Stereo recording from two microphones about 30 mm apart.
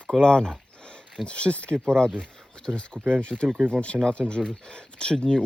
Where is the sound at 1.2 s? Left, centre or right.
Left.